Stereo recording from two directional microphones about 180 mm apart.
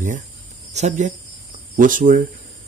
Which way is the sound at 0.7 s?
40° right (ahead or behind).